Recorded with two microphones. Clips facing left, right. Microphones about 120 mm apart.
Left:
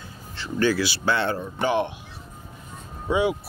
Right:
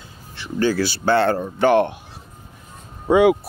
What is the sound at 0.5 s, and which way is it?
Speech, 40° right (ahead or behind).